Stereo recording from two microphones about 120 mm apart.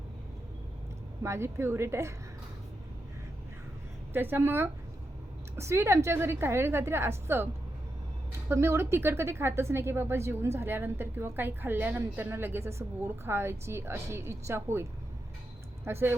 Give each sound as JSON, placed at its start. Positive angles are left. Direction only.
{"t": 1.2, "sound": "a woman's voice", "side_deg": -25}
{"t": 4.1, "sound": "a woman's voice", "side_deg": -15}
{"t": 8.4, "sound": "a woman's voice", "side_deg": -20}